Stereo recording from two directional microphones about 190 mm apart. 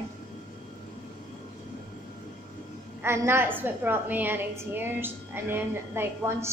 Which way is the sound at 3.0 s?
15° right (ahead or behind).